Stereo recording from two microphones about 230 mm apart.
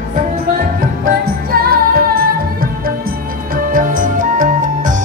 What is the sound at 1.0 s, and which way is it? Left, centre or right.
Music, right.